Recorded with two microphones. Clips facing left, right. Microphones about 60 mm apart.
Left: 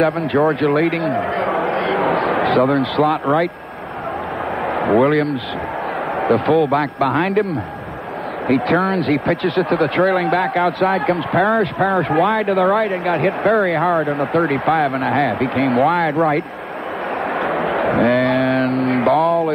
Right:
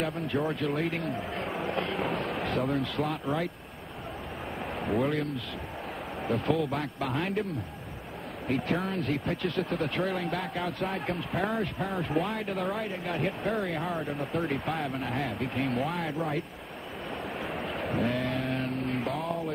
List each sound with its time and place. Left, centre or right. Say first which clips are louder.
0.0 s speech: left 14 dB; left
4.7 s a man's voice: left 14 dB; left
8.5 s speech: left 14 dB; left
17.4 s a sound: left 16 dB; left